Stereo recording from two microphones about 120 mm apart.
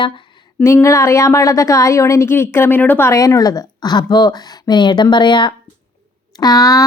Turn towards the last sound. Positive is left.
turn(degrees=25)  # may be behind; listen again after turning